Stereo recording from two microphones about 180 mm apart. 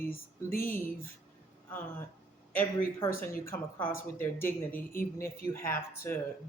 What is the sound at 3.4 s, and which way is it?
Speech, 10° left (ahead or behind).